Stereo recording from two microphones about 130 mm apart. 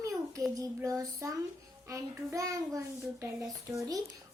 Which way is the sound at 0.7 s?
25° right (ahead or behind).